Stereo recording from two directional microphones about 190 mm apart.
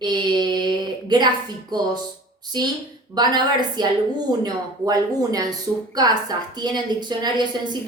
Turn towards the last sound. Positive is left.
turn(degrees=-20)  # may be behind; listen again after turning